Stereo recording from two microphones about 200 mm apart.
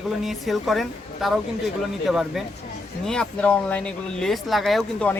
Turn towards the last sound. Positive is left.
turn(degrees=5)  # may be behind; listen again after turning